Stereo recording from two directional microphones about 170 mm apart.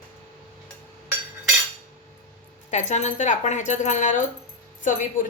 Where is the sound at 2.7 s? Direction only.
45° left (ahead or behind).